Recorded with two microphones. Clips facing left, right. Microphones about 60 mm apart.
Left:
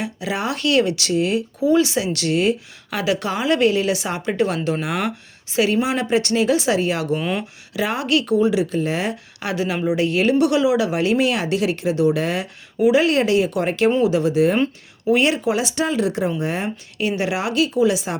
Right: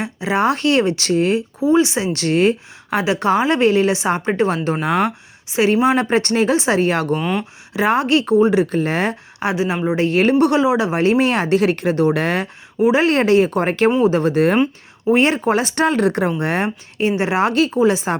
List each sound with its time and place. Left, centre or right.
0.0 s a woman's voice: right
2.1 s a woman's voice: right
7.2 s speech: centre
7.7 s a woman's voice: right
9.4 s a woman's voice: right
12.8 s a woman's voice: right
15.0 s speech: right
17.0 s a woman's voice: right